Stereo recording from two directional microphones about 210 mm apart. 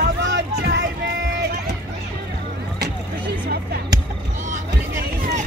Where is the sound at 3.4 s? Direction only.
50° right (ahead or behind).